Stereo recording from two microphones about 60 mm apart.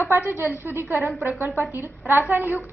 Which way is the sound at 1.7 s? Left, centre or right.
Right.